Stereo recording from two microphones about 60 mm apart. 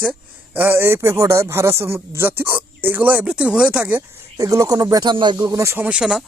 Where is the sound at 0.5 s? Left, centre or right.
Right.